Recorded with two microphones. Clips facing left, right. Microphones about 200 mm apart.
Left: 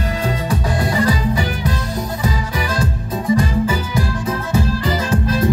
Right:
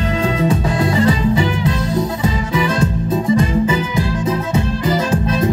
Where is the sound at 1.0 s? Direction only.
25° right (ahead or behind).